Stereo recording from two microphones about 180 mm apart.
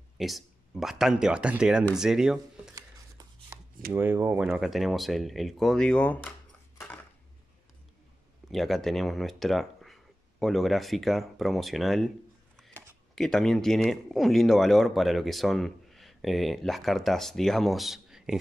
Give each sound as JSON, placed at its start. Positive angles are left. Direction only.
{"t": 0.2, "sound": "speech", "side_deg": 0}
{"t": 2.7, "sound": "chopping", "side_deg": -20}
{"t": 3.9, "sound": "speech", "side_deg": -10}
{"t": 8.5, "sound": "speech", "side_deg": 0}